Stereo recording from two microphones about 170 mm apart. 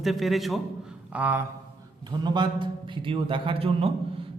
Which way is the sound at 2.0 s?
25° right (ahead or behind).